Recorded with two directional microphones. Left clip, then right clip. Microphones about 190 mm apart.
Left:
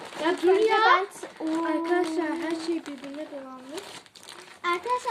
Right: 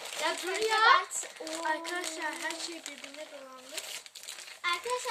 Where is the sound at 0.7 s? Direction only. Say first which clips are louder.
Left 3 dB; 10° right (ahead or behind).